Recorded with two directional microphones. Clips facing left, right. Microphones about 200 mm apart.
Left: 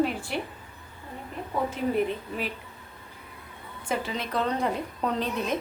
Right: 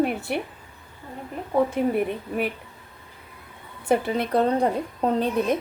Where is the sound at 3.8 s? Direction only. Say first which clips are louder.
Right 8 dB; 60° right (ahead or behind).